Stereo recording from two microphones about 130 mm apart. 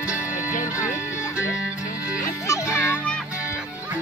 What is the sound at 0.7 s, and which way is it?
Music, 25° left (ahead or behind).